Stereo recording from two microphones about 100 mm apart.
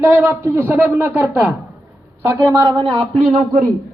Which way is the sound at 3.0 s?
90° right.